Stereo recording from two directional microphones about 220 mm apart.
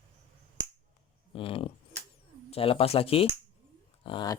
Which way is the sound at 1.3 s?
25° left (ahead or behind).